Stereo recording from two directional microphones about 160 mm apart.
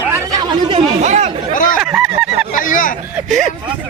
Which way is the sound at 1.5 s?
55° left (ahead or behind).